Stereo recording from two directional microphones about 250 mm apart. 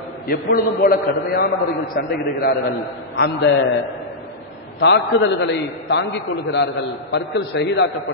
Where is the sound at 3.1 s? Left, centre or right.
Left.